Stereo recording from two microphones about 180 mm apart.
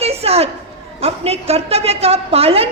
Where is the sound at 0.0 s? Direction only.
35° right (ahead or behind).